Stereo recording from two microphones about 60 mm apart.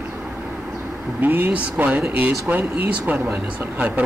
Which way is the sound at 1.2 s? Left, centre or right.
Right.